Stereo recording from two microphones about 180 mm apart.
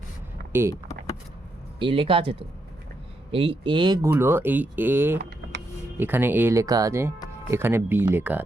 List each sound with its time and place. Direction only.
0.5 s speech: 15° right (ahead or behind)
1.8 s speech: 30° right (ahead or behind); by 8.4 s 10° right (ahead or behind)